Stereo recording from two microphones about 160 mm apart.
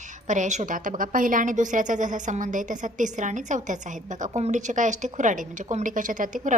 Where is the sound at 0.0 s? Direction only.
50° right (ahead or behind).